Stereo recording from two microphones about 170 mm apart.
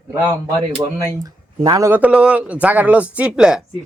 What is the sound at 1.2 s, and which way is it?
Speech, 20° right (ahead or behind).